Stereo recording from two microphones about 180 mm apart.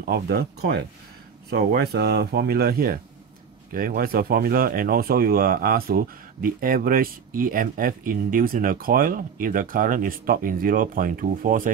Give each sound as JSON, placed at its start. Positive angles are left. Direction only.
{"t": 0.0, "sound": "speech", "side_deg": -60}